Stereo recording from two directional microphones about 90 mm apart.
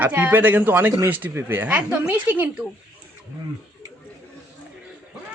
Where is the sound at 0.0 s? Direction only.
20° right (ahead or behind).